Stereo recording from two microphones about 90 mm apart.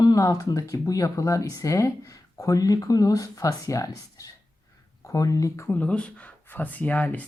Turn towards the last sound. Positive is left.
turn(degrees=15)  # may be behind; listen again after turning